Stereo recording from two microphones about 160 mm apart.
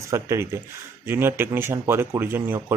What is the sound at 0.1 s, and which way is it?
Speech, 20° right (ahead or behind).